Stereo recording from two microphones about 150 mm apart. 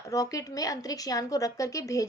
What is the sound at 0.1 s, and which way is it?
A woman's voice, 25° left (ahead or behind).